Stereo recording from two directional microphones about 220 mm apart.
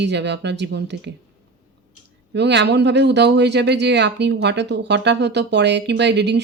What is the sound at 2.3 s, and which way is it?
Speech, 50° right (ahead or behind).